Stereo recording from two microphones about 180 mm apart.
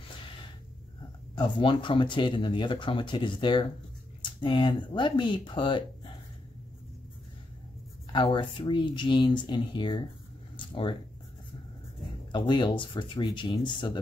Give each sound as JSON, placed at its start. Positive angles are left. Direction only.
{"t": 1.3, "sound": "speech", "side_deg": 25}
{"t": 8.1, "sound": "speech", "side_deg": 25}
{"t": 10.5, "sound": "a sound", "side_deg": 30}
{"t": 12.3, "sound": "speech", "side_deg": 25}